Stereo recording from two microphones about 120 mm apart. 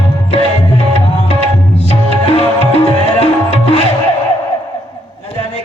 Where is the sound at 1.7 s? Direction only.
60° left (ahead or behind).